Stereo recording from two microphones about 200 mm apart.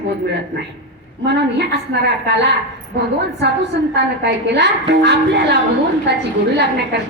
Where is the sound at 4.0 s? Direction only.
60° right (ahead or behind).